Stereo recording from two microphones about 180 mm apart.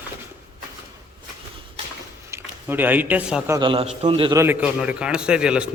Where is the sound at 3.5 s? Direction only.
30° right (ahead or behind).